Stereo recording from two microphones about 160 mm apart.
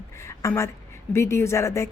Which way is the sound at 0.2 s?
15° left (ahead or behind).